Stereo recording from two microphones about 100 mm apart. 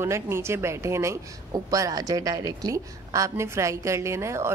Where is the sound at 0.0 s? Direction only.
25° right (ahead or behind).